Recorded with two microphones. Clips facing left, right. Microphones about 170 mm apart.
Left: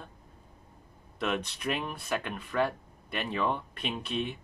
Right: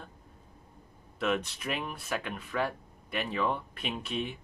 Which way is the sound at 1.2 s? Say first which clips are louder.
Right 1 dB; centre (ahead or behind).